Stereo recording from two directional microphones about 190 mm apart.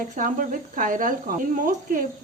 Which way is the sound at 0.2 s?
45° right (ahead or behind).